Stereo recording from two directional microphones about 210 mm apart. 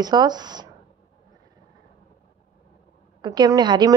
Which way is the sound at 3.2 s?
20° right (ahead or behind).